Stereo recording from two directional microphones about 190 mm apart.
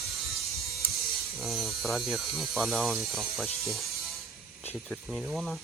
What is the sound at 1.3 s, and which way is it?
Speech, centre (ahead or behind).